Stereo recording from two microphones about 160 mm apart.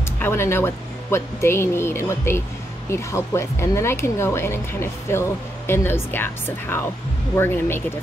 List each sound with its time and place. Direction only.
0.2 s speech: 15° left (ahead or behind)